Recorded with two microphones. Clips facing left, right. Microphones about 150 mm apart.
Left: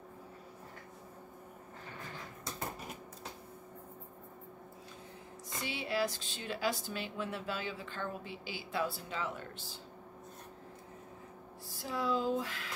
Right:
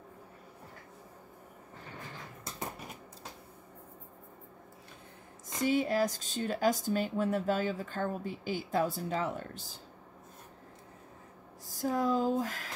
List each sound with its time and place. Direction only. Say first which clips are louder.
5.6 s speech: right 7 dB; 45° right (ahead or behind)
11.6 s speech: right 6 dB; 45° right (ahead or behind)